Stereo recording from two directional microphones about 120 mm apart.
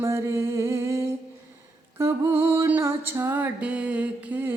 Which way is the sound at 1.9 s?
20° right (ahead or behind).